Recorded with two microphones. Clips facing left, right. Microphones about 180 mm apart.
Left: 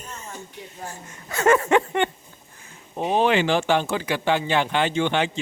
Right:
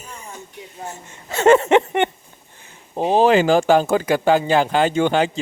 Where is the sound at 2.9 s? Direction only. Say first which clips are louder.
Right 5 dB; 35° right (ahead or behind).